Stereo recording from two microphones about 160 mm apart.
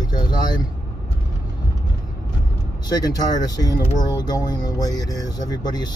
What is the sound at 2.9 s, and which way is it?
Speech, 25° left (ahead or behind).